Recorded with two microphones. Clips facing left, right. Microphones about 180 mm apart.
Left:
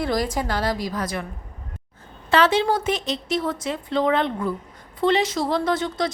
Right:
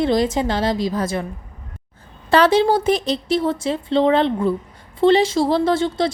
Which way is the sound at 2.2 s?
35° right (ahead or behind).